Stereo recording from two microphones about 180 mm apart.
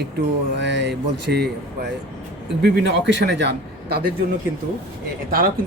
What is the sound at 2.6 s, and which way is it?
A man's voice, 85° right.